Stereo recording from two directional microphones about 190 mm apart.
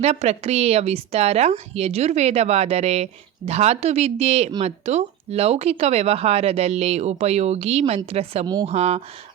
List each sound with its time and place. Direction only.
0.0 s speech: 35° right (ahead or behind)